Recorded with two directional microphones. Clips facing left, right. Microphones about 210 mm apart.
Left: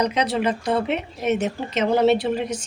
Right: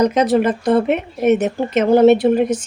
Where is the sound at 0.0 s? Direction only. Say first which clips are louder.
Right 7 dB; 45° right (ahead or behind).